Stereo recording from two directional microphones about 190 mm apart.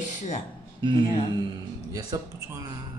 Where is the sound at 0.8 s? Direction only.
25° right (ahead or behind).